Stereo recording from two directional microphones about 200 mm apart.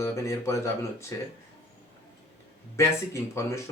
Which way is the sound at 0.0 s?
15° left (ahead or behind).